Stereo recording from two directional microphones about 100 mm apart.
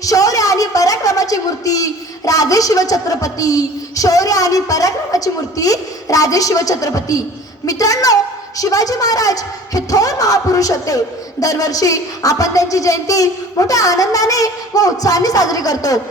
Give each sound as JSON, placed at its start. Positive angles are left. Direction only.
{"t": 0.0, "sound": "a woman's voice", "side_deg": 35}